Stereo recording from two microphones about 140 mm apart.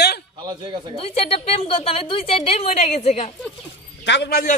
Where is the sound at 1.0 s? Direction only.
45° left (ahead or behind).